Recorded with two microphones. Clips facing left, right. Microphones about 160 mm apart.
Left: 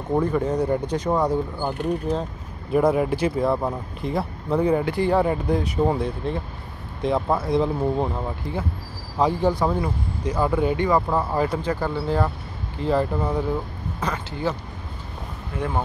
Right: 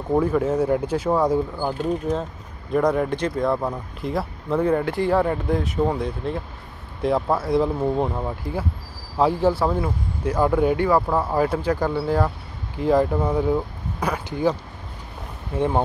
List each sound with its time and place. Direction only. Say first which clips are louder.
0.1 s speech: right 2 dB; 5° right (ahead or behind)
2.7 s speech: left 1 dB; 5° left (ahead or behind); by 14.6 s 10° right (ahead or behind)
15.5 s speech: right 6 dB; 25° right (ahead or behind)